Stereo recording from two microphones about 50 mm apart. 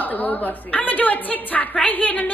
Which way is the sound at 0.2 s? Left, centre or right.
Left.